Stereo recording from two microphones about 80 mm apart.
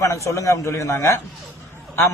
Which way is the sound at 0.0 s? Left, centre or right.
Left.